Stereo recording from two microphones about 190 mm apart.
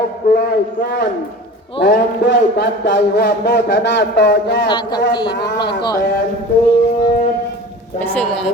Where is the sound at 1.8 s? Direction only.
65° left (ahead or behind).